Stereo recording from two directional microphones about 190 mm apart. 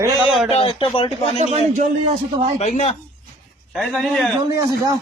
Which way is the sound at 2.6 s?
40° left (ahead or behind).